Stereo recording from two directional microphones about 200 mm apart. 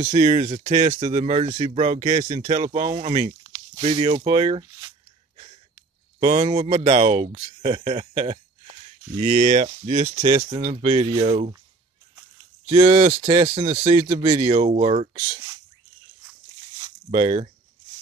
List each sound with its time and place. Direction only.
0.0 s speech: 30° right (ahead or behind)
6.1 s speech: 30° right (ahead or behind)
12.6 s speech: 25° right (ahead or behind)
16.8 s a sound: 30° right (ahead or behind)